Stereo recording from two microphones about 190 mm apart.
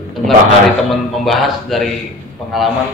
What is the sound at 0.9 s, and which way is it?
A man's voice, centre (ahead or behind).